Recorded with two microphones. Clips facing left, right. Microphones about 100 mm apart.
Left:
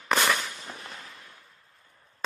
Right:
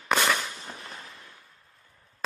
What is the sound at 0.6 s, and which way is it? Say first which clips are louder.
Fireworks: even; 35° right (ahead or behind).